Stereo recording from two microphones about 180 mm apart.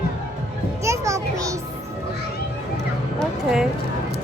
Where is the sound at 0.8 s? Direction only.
15° right (ahead or behind).